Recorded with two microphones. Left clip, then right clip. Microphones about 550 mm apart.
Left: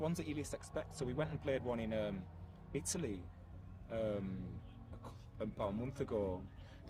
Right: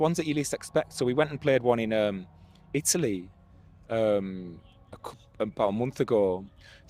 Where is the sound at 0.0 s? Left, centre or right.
Right.